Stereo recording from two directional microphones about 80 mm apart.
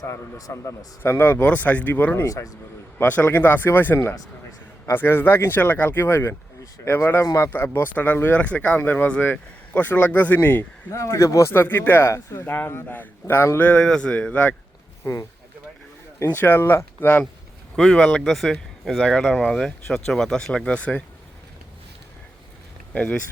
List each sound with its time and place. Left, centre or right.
0.0 s a man's voice: left
2.2 s a man's voice: left
3.0 s a man's voice: left
10.9 s speech: left
13.7 s a man's voice: centre
15.1 s speech: left
16.2 s a man's voice: left
17.7 s speech: centre